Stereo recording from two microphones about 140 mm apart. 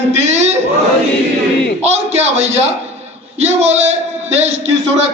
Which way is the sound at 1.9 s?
50° right (ahead or behind).